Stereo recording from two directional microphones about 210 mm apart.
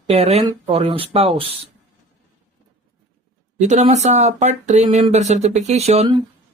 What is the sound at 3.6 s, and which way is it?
Speech, 35° right (ahead or behind).